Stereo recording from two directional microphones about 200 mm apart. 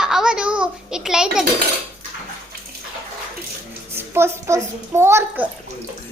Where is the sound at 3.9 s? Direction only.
10° right (ahead or behind).